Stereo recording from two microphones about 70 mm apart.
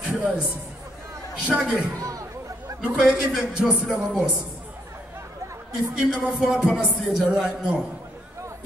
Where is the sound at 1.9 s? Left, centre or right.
Right.